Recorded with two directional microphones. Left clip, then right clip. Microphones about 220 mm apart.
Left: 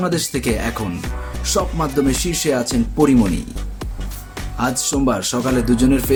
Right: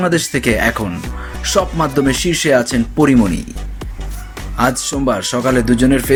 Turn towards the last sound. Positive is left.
turn(degrees=-10)  # may be behind; listen again after turning